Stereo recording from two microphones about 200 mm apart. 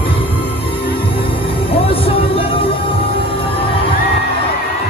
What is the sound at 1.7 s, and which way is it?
Music, 30° left (ahead or behind).